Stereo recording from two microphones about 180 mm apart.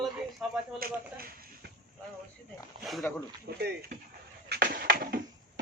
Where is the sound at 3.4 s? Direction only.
60° right (ahead or behind).